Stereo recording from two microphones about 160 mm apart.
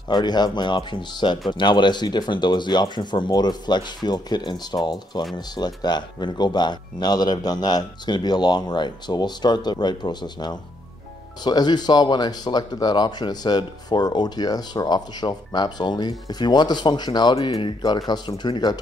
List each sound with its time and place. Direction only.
0.1 s speech: 25° left (ahead or behind)